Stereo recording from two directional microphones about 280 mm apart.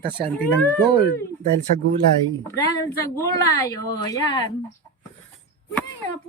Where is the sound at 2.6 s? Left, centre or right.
Centre.